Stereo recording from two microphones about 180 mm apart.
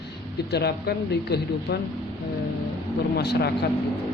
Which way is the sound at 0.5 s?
65° left (ahead or behind).